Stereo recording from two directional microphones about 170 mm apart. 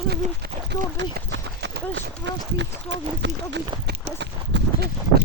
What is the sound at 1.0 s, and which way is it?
Clip-clop, 90° right.